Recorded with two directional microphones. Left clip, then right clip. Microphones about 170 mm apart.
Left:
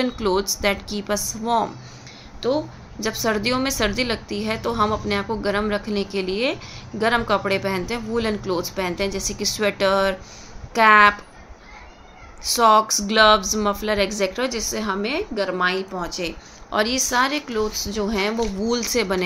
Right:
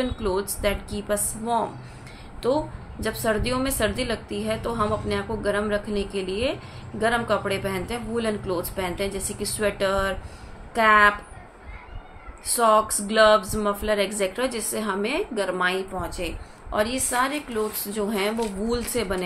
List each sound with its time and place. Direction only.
0.2 s speech: 40° left (ahead or behind)
2.4 s a woman's voice: 15° left (ahead or behind)
3.0 s speech: 30° left (ahead or behind)
12.4 s a woman's voice: 35° left (ahead or behind)
16.2 s speech: 40° left (ahead or behind)